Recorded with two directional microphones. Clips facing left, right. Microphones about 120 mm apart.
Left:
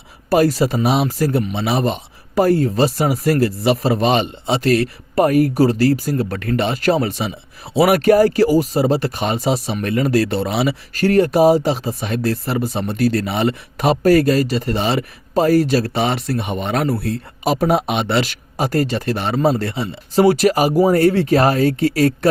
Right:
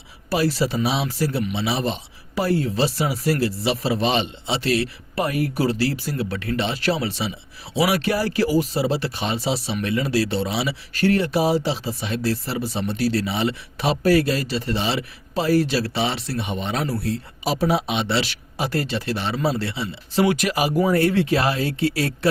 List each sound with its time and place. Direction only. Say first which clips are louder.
0.3 s speech: left 6 dB; 45° left (ahead or behind)